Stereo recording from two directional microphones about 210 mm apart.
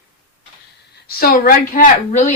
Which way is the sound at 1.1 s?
45° left (ahead or behind).